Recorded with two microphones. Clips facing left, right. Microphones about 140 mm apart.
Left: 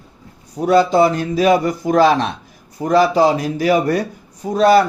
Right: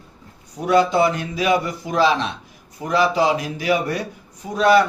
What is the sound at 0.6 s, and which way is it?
A man's voice, 35° left (ahead or behind).